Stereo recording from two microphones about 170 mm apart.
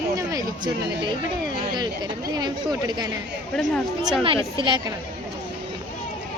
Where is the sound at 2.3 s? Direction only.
25° right (ahead or behind).